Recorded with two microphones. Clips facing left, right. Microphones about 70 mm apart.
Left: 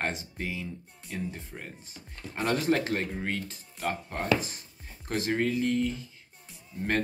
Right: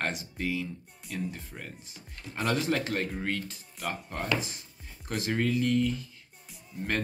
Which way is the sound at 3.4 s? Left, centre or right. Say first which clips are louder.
Left 3 dB; left.